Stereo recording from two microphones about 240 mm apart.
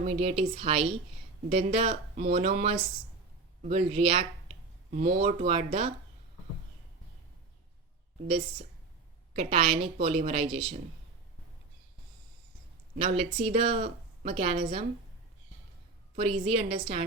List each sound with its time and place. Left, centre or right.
0.0 s a woman's voice: right
9.3 s a woman's voice: right
13.1 s a woman's voice: right
16.1 s a woman's voice: right